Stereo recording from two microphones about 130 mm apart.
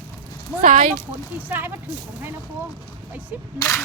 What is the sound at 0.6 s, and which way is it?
Speech, 90° right.